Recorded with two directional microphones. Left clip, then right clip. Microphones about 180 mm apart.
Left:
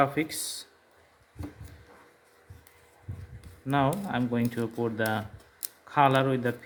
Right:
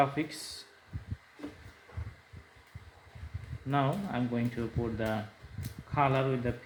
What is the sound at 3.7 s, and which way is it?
Speech, 35° left (ahead or behind).